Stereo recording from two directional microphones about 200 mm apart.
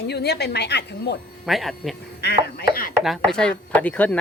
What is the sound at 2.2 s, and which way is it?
Speech, 55° left (ahead or behind).